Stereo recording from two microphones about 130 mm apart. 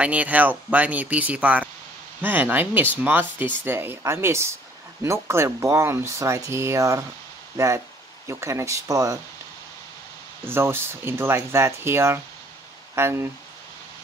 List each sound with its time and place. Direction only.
0.0 s speech: 10° right (ahead or behind)
10.4 s speech: 20° right (ahead or behind)